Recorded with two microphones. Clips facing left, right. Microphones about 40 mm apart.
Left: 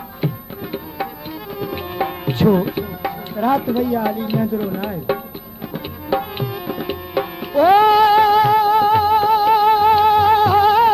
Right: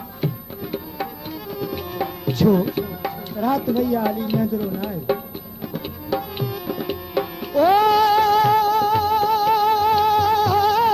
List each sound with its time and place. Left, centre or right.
0.2 s music: left
3.3 s speech: left
6.0 s music: left